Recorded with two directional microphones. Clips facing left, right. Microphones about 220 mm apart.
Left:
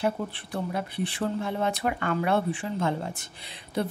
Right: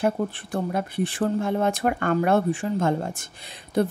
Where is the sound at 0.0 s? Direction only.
45° right (ahead or behind).